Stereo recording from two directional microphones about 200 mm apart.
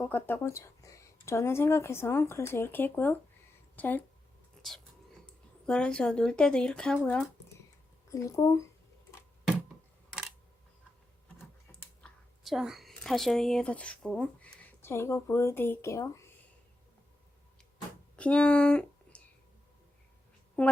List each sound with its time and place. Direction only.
0.0 s speech: 10° left (ahead or behind)
4.6 s whispering: 5° left (ahead or behind)
5.2 s speech: 5° left (ahead or behind)
8.1 s speech: 15° left (ahead or behind)
11.3 s computer keyboard: 5° left (ahead or behind)
18.2 s speech: 5° left (ahead or behind)
20.6 s speech: 5° left (ahead or behind)